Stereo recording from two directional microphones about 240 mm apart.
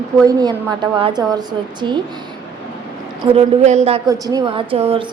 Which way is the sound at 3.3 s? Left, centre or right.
Right.